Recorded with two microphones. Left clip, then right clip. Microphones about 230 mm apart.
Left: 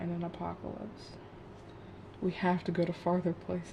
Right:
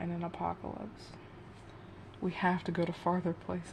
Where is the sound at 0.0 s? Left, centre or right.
Right.